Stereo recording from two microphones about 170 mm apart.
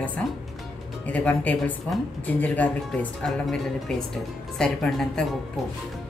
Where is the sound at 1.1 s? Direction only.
10° left (ahead or behind).